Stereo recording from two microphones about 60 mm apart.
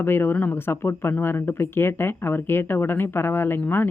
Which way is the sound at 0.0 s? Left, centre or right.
Left.